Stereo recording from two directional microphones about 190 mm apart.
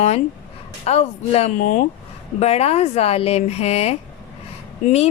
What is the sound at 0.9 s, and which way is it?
A woman's voice, 35° left (ahead or behind).